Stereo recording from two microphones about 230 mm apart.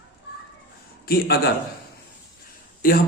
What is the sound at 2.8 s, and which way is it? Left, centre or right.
Speech, left.